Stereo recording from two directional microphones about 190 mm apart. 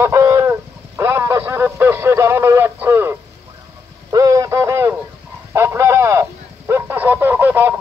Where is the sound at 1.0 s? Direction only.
15° right (ahead or behind).